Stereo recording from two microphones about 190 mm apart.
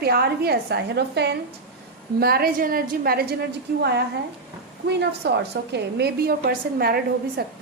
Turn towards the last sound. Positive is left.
turn(degrees=-55)  # may be behind; listen again after turning